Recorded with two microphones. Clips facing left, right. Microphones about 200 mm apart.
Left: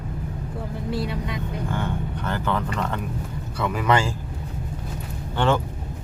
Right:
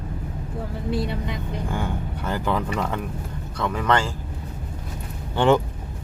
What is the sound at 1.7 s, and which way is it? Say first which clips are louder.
Speech: even; 10° right (ahead or behind).